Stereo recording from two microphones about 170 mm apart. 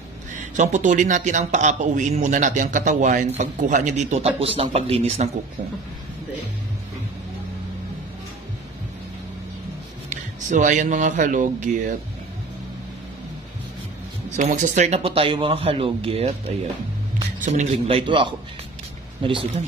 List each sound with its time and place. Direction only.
0.6 s a man's voice: 45° right (ahead or behind)
10.5 s a man's voice: 45° right (ahead or behind)
14.3 s speech: 50° right (ahead or behind); by 18.3 s 30° right (ahead or behind)